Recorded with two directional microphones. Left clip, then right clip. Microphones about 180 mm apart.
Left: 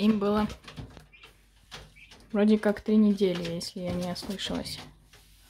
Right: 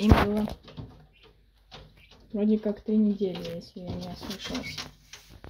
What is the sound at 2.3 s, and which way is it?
Speech, 30° left (ahead or behind).